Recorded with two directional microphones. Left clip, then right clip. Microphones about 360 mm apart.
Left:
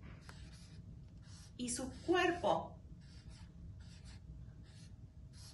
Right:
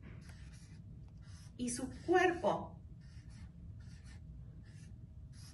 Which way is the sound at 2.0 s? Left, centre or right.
Centre.